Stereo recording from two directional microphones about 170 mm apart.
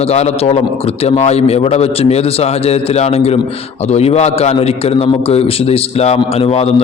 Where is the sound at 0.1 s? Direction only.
40° left (ahead or behind).